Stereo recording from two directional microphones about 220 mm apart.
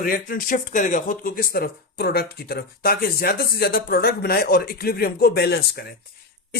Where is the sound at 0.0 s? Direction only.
40° left (ahead or behind).